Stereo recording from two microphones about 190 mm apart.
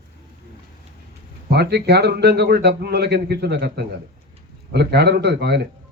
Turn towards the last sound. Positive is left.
turn(degrees=-60)  # may be behind; listen again after turning